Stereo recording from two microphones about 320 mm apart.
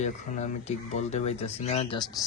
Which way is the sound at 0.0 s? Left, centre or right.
Left.